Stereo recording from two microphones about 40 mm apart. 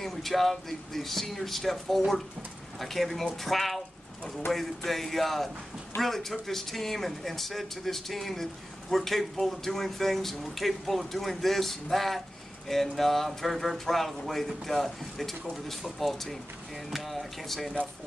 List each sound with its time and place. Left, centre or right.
0.0 s speech: centre